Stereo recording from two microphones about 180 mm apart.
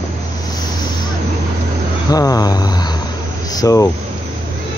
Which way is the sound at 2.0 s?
20° left (ahead or behind).